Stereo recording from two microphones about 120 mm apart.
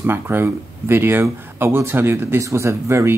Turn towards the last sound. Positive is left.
turn(degrees=-25)  # may be behind; listen again after turning